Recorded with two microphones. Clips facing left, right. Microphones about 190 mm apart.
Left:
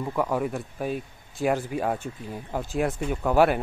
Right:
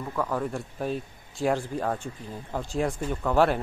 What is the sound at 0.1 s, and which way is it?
A man's voice, 15° left (ahead or behind).